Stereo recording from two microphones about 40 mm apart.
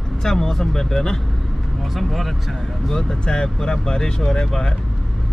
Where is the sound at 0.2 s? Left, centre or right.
Centre.